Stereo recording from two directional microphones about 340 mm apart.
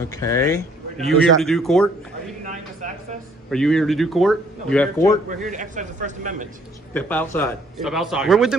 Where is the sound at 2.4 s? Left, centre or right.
Right.